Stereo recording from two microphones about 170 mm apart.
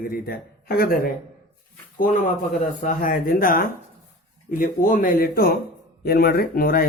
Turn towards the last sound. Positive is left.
turn(degrees=60)  # may be behind; listen again after turning